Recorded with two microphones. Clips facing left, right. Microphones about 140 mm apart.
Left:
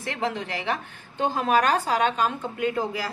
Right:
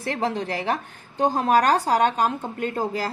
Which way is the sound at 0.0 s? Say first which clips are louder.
Right 3 dB; 35° right (ahead or behind).